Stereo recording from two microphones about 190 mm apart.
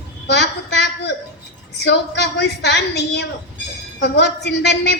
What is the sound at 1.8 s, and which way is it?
A woman's voice, 65° left (ahead or behind).